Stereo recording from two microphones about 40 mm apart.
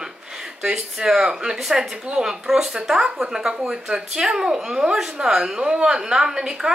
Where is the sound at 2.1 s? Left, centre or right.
Centre.